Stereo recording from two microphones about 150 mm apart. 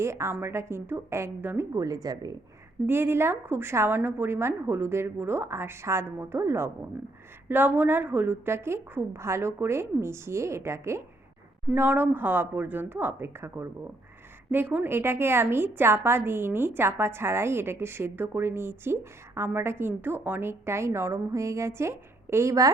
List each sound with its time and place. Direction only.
0.0 s a woman's voice: 20° right (ahead or behind)